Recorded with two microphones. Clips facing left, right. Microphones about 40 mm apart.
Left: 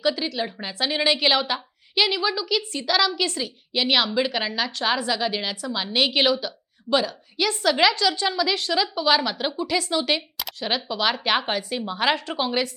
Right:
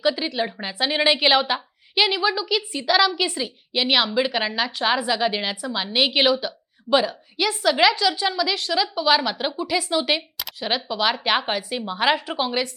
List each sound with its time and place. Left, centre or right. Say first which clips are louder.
0.0 s a woman's voice: right 2 dB; centre